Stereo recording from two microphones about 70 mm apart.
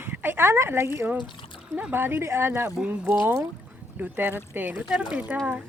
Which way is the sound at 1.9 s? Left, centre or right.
Right.